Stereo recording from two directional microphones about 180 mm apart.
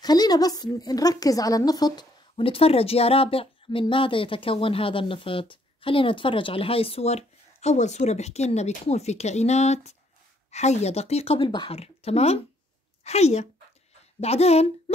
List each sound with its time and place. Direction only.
0.0 s a woman's voice: 20° left (ahead or behind)